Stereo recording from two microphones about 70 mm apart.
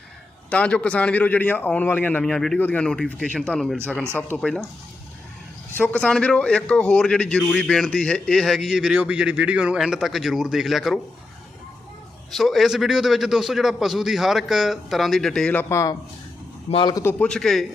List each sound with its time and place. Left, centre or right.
0.5 s a man's voice: centre
2.2 s a man's voice: centre
2.6 s a man's voice: left
5.7 s a man's voice: left; by 8.7 s centre
8.7 s a man's voice: centre
12.3 s a man's voice: centre
15.7 s a man's voice: left
17.2 s a man's voice: centre